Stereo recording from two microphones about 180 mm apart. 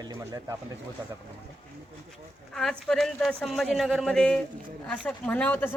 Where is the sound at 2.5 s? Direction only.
5° left (ahead or behind).